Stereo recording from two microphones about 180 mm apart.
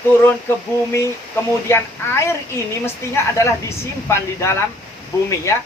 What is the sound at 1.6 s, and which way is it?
Speech, 15° left (ahead or behind).